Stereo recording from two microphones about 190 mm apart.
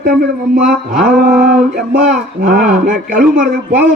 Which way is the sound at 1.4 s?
60° right (ahead or behind).